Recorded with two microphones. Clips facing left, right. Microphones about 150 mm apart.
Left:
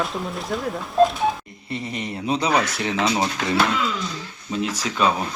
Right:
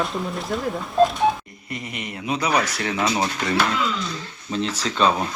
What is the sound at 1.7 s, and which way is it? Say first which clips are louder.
Speech: left 3 dB; 35° left (ahead or behind).